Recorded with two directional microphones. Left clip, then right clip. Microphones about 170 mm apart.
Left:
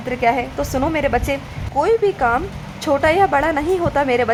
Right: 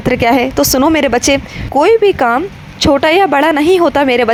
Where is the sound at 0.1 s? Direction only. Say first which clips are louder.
Right 7 dB; 40° right (ahead or behind).